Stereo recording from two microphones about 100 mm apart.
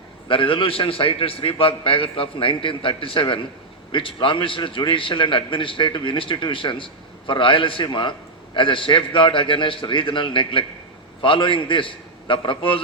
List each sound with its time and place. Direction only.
0.3 s a man's voice: 60° left (ahead or behind)